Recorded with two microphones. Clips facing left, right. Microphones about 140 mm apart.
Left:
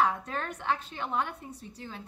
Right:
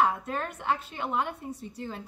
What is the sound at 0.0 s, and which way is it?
Speech, 15° right (ahead or behind).